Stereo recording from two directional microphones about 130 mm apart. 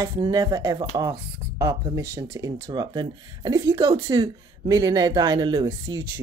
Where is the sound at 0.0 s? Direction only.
25° right (ahead or behind).